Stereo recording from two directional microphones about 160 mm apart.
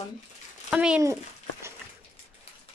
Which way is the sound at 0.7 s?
5° right (ahead or behind).